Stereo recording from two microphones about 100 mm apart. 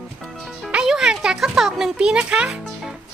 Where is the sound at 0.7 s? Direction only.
5° right (ahead or behind).